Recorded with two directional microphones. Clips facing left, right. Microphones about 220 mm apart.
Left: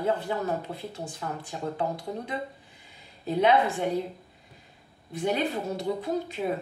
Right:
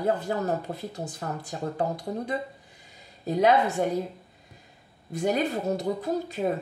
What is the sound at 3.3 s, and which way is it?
Speech, 40° right (ahead or behind).